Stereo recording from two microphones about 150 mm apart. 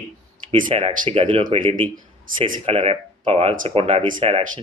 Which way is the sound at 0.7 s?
40° right (ahead or behind).